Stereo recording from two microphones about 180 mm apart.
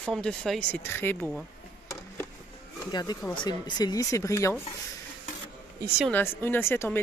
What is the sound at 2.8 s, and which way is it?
Speech, 20° left (ahead or behind).